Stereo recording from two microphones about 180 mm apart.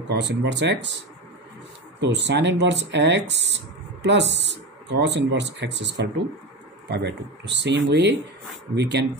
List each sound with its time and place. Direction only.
0.1 s speech: 70° right (ahead or behind)